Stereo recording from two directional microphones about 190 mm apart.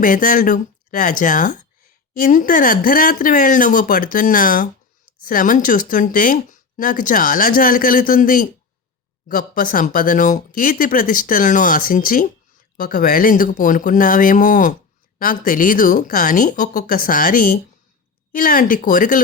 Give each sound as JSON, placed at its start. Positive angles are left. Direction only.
{"t": 0.0, "sound": "speech", "side_deg": 45}